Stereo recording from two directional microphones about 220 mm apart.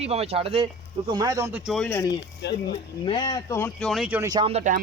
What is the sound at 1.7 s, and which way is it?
Speech, 10° left (ahead or behind).